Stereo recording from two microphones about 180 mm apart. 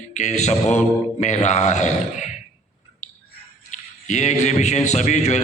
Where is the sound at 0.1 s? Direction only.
40° left (ahead or behind).